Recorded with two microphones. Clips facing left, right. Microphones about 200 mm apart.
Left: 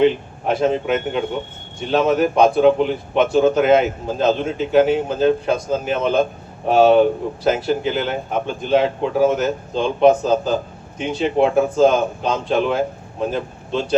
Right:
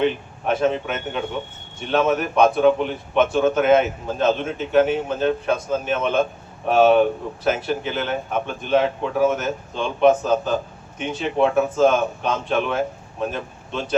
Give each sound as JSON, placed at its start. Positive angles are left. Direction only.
{"t": 0.0, "sound": "speech", "side_deg": 35}